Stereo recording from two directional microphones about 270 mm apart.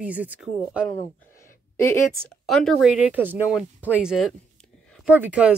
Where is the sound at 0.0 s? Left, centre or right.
Centre.